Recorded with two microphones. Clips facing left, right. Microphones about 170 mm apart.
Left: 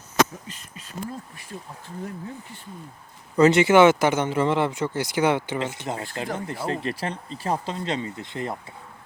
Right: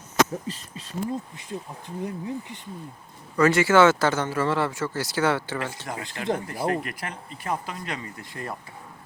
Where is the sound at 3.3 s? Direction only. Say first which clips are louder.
Left 3 dB; 20° left (ahead or behind).